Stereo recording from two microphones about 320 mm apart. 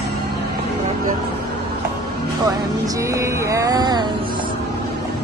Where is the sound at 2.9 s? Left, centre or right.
Centre.